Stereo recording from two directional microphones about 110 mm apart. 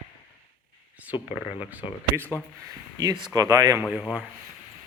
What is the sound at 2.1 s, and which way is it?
Speech, 25° right (ahead or behind).